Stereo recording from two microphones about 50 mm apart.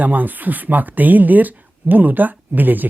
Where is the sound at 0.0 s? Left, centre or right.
Right.